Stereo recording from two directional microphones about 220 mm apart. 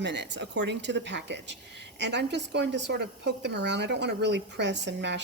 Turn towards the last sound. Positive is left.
turn(degrees=-50)  # may be behind; listen again after turning